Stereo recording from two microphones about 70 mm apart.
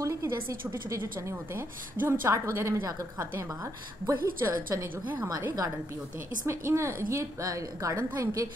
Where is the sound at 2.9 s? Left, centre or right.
Right.